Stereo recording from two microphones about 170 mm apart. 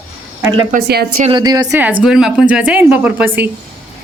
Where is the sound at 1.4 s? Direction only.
20° right (ahead or behind).